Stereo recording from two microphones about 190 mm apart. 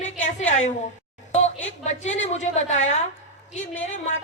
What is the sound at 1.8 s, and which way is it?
Speech, 40° left (ahead or behind).